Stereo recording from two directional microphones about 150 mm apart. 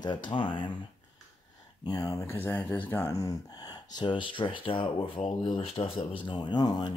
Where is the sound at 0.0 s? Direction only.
30° left (ahead or behind).